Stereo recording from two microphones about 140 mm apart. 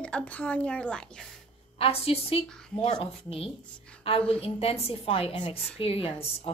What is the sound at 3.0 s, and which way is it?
A woman's voice, 45° left (ahead or behind).